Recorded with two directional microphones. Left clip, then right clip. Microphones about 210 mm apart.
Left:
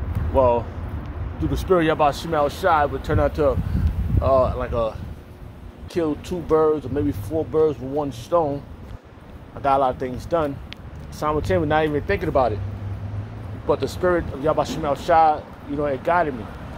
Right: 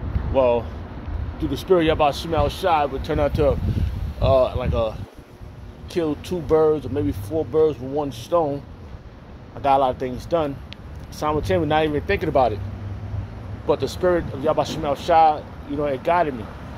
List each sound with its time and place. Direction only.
0.3 s speech: 10° right (ahead or behind)
5.9 s speech: 15° right (ahead or behind)
9.6 s speech: 15° right (ahead or behind)
13.7 s speech: 10° right (ahead or behind)